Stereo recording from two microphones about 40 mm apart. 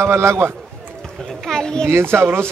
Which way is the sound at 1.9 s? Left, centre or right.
Right.